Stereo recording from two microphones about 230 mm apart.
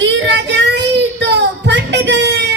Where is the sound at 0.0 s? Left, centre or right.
Right.